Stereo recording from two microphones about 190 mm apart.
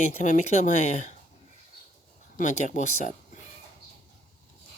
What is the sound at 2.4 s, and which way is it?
Speech, 40° left (ahead or behind).